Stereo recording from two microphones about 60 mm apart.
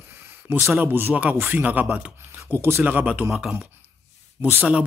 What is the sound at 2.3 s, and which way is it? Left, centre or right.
Speech, right.